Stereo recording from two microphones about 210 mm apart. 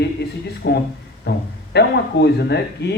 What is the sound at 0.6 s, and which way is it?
Speech, 55° left (ahead or behind).